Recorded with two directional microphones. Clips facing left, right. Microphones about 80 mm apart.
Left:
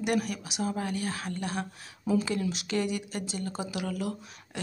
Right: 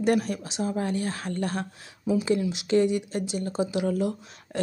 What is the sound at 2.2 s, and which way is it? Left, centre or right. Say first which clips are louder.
Speech: right 5 dB; right.